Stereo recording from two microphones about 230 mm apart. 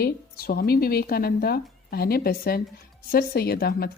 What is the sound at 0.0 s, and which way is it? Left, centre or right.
A woman's voice, left.